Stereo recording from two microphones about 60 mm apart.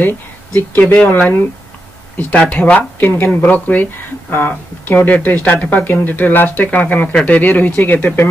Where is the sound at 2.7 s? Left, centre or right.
Left.